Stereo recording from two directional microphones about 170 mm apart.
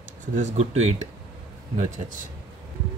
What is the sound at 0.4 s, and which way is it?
A man's voice, 40° right (ahead or behind).